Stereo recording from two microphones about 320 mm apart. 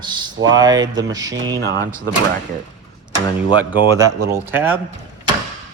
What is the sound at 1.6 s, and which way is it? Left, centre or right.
Speech, right.